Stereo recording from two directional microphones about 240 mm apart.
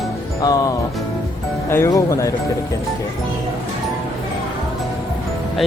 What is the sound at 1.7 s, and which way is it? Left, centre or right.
Speech, centre.